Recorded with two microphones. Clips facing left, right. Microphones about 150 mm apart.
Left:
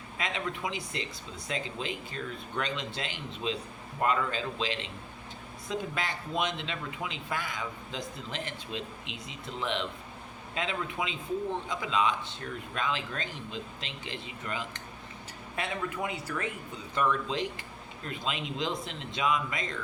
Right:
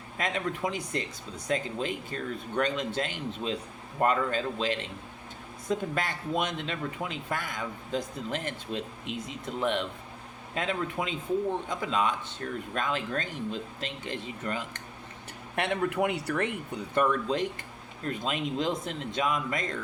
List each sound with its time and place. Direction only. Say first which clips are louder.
0.2 s speech: right 4 dB; 45° right (ahead or behind)
15.5 s speech: right 6 dB; 65° right (ahead or behind); by 19.7 s 45° right (ahead or behind)